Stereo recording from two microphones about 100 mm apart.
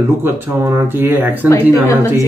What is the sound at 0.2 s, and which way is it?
A man's voice, 20° right (ahead or behind).